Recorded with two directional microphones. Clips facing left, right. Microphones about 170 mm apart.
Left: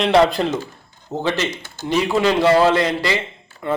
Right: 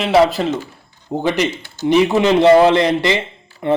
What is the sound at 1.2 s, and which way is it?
A man's voice, 15° right (ahead or behind).